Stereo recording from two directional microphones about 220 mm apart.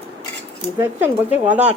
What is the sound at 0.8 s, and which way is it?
Speech, 10° right (ahead or behind).